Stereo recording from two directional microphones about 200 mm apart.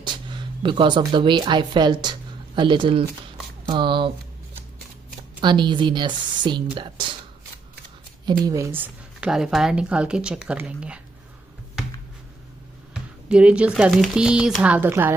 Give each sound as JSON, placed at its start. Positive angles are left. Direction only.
{"t": 0.0, "sound": "speech", "side_deg": -25}
{"t": 5.4, "sound": "speech", "side_deg": -25}
{"t": 8.5, "sound": "speech", "side_deg": -10}
{"t": 12.9, "sound": "speech", "side_deg": -5}